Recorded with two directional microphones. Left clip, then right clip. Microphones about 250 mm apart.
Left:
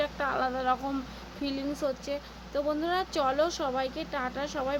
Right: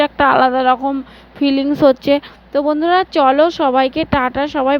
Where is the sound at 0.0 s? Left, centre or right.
Right.